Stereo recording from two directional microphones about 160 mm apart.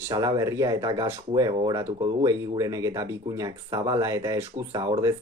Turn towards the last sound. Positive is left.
turn(degrees=-20)  # may be behind; listen again after turning